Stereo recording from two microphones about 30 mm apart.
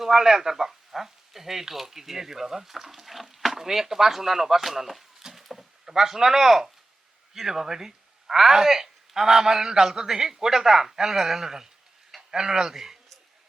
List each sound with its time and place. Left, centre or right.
0.0 s speech: centre
5.4 s a sound: centre
7.3 s a man's voice: centre